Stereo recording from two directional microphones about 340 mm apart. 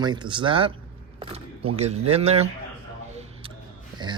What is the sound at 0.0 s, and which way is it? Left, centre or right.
Speech, centre.